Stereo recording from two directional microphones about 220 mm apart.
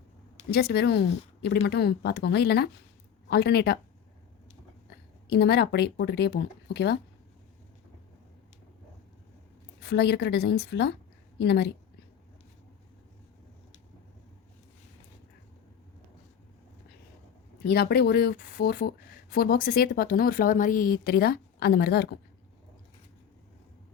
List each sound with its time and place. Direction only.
0.5 s speech: 50° left (ahead or behind)
5.3 s speech: 50° left (ahead or behind)
9.8 s speech: 50° left (ahead or behind)
17.6 s speech: 45° left (ahead or behind)